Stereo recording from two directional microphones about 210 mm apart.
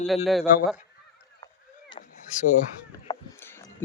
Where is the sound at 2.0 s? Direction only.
35° left (ahead or behind).